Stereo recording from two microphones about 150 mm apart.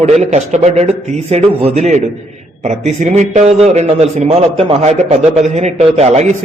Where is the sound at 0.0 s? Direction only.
50° right (ahead or behind).